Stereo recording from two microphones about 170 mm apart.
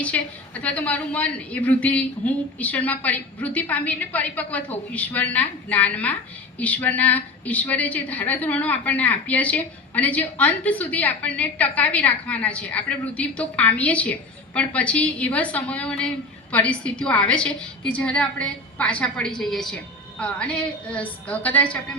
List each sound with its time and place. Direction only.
0.0 s a woman's voice: 10° left (ahead or behind)